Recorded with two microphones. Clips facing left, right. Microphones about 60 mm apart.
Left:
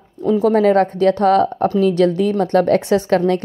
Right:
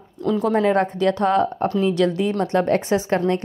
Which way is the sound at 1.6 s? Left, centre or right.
Left.